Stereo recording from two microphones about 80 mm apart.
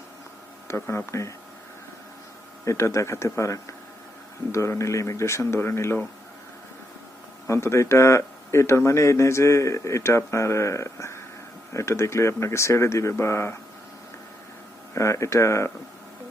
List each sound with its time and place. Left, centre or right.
0.7 s speech: left
2.6 s speech: left
7.4 s speech: left
14.9 s speech: left